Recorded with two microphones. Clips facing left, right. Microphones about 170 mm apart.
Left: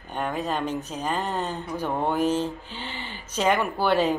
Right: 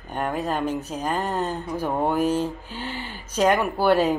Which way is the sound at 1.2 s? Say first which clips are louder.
Right 3 dB; 40° right (ahead or behind).